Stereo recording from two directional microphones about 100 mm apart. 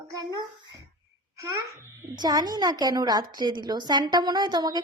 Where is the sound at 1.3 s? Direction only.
25° right (ahead or behind).